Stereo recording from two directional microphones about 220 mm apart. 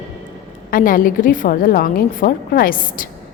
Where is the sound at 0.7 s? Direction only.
40° left (ahead or behind).